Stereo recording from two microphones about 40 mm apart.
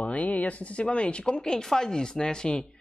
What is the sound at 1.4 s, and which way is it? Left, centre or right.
Speech, centre.